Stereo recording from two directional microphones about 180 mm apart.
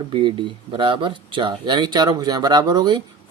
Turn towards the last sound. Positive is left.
turn(degrees=-25)  # may be behind; listen again after turning